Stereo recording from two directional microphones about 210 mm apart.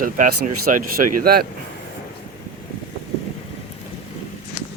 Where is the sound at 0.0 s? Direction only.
45° right (ahead or behind).